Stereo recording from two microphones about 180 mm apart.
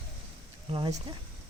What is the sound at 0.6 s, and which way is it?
Speech, 25° right (ahead or behind).